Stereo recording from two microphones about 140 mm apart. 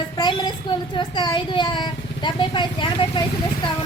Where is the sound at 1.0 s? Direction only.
35° left (ahead or behind).